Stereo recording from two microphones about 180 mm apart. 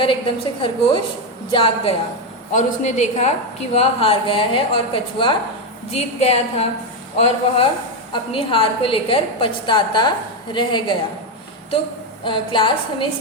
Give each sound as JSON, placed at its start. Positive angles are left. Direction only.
{"t": 0.0, "sound": "a woman's voice", "side_deg": 30}
{"t": 12.2, "sound": "a woman's voice", "side_deg": 30}